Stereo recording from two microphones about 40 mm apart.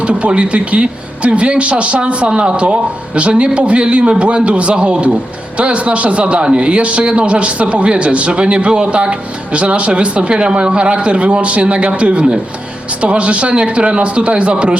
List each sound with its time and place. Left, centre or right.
0.0 s a man's voice: right